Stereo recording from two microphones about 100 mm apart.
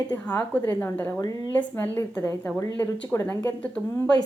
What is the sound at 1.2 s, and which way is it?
Speech, 40° left (ahead or behind).